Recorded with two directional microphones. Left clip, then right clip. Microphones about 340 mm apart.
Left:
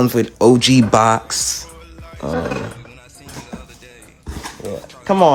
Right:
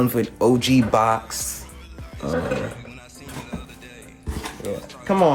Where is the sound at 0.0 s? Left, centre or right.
Left.